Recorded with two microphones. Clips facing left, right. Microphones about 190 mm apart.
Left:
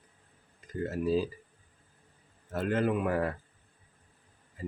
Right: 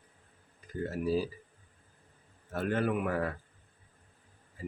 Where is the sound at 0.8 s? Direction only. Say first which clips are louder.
Left 2 dB; 20° left (ahead or behind).